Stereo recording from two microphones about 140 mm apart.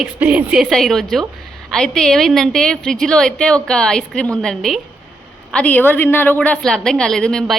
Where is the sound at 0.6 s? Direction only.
5° left (ahead or behind).